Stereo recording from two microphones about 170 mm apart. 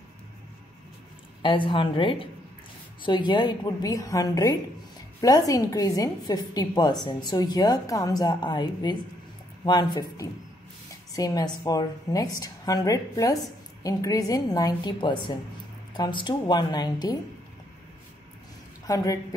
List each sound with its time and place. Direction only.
1.4 s a woman's voice: 30° left (ahead or behind)
18.9 s a woman's voice: 20° left (ahead or behind)